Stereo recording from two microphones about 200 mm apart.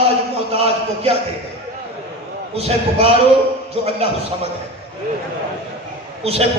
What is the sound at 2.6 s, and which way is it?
A man's voice, 30° right (ahead or behind).